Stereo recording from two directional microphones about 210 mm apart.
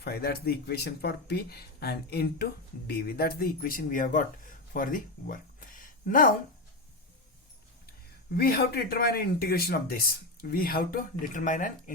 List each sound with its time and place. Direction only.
0.0 s speech: 50° left (ahead or behind)
8.3 s speech: 45° left (ahead or behind)